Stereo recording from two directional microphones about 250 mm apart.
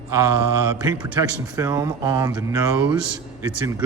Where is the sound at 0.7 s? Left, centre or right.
Centre.